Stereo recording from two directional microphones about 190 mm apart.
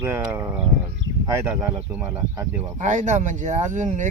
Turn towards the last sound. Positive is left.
turn(degrees=-40)  # may be behind; listen again after turning